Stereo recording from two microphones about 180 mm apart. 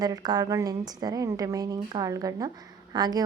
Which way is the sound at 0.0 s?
20° right (ahead or behind).